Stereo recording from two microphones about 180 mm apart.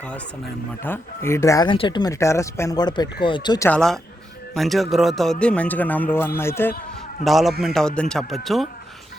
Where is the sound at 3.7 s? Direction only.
5° left (ahead or behind).